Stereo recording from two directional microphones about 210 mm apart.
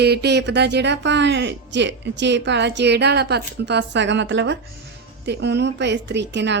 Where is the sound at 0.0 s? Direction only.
50° right (ahead or behind).